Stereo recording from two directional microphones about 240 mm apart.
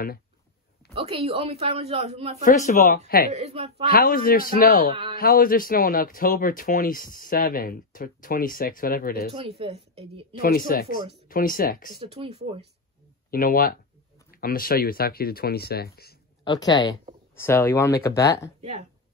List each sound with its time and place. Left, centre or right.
0.9 s speech: right
2.4 s speech: left
3.3 s speech: right
3.9 s speech: left
9.3 s speech: right
10.4 s speech: left
12.0 s speech: right
13.3 s speech: left
16.4 s speech: centre
18.6 s speech: right